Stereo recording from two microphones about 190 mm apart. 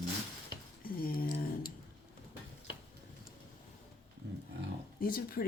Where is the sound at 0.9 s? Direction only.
50° left (ahead or behind).